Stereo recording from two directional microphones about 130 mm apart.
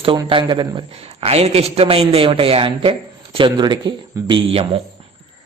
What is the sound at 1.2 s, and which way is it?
A man's voice, 55° right (ahead or behind).